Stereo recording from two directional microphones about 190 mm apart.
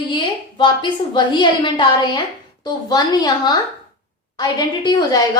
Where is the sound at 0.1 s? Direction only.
25° left (ahead or behind).